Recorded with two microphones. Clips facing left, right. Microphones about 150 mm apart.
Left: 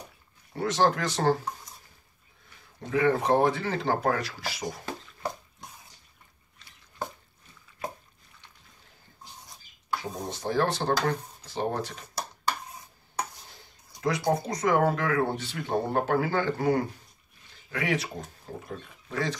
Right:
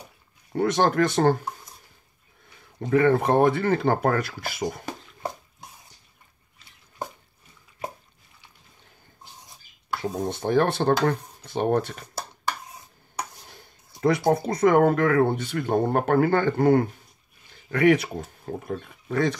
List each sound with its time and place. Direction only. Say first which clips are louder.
0.6 s speech: right 4 dB; 55° right (ahead or behind)
2.9 s speech: right 4 dB; 55° right (ahead or behind)
10.3 s speech: right 4 dB; 60° right (ahead or behind)
14.0 s speech: right 5 dB; 55° right (ahead or behind)